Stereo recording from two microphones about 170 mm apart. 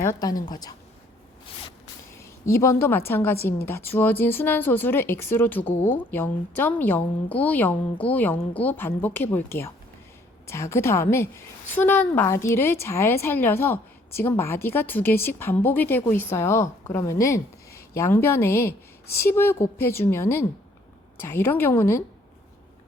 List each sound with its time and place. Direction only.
0.0 s a woman's voice: 20° left (ahead or behind)
2.5 s speech: 15° left (ahead or behind)